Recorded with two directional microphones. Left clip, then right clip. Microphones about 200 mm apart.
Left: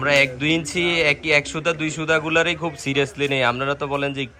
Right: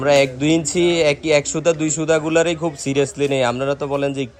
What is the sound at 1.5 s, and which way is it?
Speech, 15° right (ahead or behind).